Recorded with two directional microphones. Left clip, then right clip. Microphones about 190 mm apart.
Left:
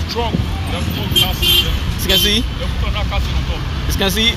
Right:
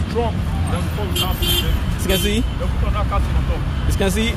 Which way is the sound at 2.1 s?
15° right (ahead or behind).